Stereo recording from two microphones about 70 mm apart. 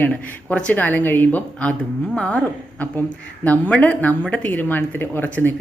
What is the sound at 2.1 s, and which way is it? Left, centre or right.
Speech, centre.